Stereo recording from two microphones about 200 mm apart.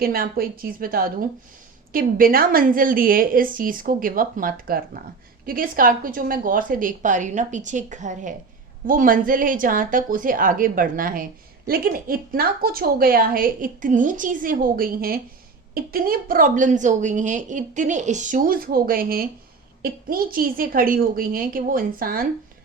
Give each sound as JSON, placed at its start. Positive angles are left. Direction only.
{"t": 0.0, "sound": "a woman's voice", "side_deg": -50}